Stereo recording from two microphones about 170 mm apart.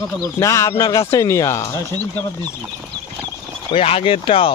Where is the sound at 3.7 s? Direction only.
35° left (ahead or behind).